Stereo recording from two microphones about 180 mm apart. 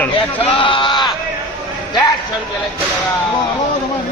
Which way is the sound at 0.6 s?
25° left (ahead or behind).